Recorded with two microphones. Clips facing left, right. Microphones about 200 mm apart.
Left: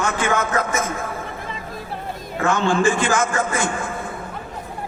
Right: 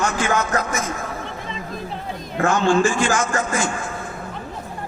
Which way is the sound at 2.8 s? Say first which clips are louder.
Left 1 dB; 55° left (ahead or behind).